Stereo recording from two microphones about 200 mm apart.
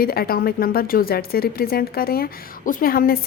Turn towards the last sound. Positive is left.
turn(degrees=45)  # may be behind; listen again after turning